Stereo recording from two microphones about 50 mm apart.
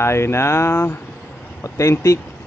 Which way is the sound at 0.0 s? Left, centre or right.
Left.